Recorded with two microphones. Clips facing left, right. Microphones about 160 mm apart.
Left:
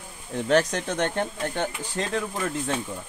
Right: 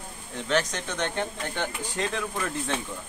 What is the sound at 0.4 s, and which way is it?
Speech, 50° left (ahead or behind).